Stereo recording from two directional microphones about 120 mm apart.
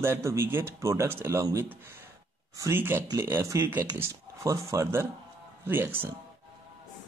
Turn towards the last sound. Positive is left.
turn(degrees=-15)  # may be behind; listen again after turning